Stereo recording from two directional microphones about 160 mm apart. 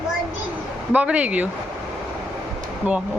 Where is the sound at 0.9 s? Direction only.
10° right (ahead or behind).